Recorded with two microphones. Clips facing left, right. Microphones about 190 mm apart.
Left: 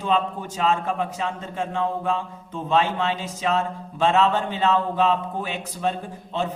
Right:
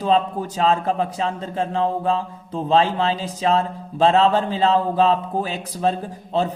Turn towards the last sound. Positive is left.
turn(degrees=-35)  # may be behind; listen again after turning